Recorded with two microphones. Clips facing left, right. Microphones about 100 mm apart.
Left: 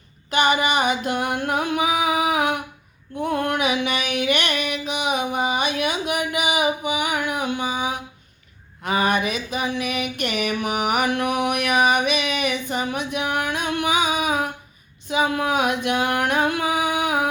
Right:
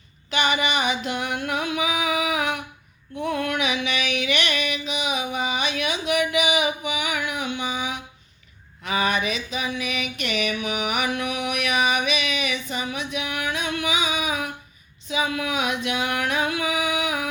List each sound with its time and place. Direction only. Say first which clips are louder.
0.3 s music: left 4 dB; 45° left (ahead or behind)
3.2 s a sound: left 3 dB; 40° left (ahead or behind)
15.0 s singing: left 4 dB; 50° left (ahead or behind)